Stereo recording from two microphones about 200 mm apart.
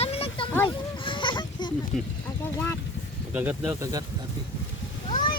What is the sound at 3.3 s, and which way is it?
Speech, 10° right (ahead or behind).